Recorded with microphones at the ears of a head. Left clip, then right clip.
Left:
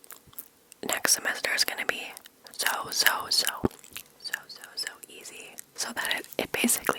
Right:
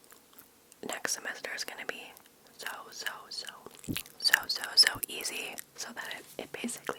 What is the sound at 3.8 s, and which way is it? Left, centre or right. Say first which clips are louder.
Whispering: right 9 dB; right.